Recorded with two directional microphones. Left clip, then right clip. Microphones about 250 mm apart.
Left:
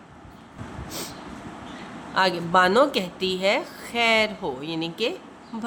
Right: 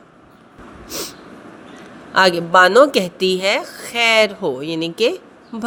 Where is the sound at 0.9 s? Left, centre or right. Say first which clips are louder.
Right 8 dB; right.